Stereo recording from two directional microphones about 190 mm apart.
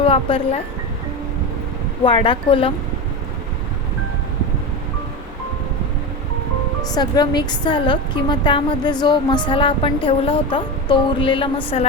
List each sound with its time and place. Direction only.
0.0 s speech: 30° left (ahead or behind)
2.0 s a woman's voice: 25° left (ahead or behind)
6.9 s a woman's voice: 20° left (ahead or behind)